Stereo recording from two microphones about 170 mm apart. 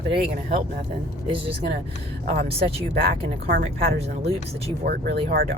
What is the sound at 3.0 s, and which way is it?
Speech, 70° right (ahead or behind).